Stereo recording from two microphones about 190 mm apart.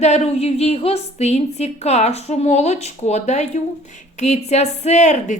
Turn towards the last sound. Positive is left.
turn(degrees=40)  # may be behind; listen again after turning